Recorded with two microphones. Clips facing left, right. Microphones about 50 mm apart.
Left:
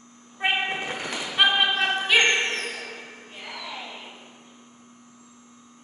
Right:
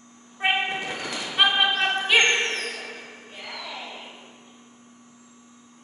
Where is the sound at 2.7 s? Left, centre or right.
Centre.